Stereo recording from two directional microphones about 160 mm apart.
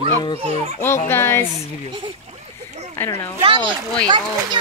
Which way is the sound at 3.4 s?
35° right (ahead or behind).